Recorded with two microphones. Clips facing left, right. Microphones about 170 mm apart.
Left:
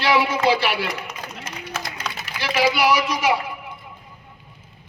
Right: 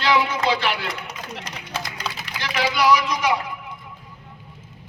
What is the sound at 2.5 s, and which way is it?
Speech, 10° left (ahead or behind).